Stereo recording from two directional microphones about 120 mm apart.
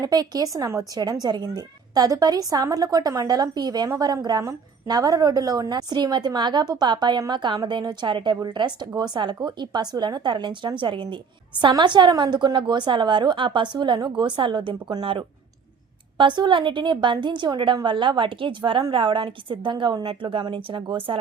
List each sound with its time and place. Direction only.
0.0 s speech: 35° right (ahead or behind)